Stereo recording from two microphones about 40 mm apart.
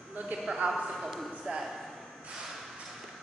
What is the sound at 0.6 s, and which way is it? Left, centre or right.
Speech, right.